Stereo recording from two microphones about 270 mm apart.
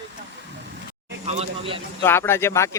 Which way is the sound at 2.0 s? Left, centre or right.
Centre.